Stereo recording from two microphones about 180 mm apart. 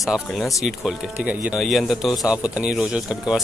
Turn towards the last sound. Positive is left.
turn(degrees=-5)  # may be behind; listen again after turning